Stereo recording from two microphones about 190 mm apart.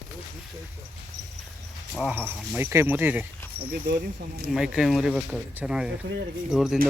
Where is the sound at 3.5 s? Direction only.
55° right (ahead or behind).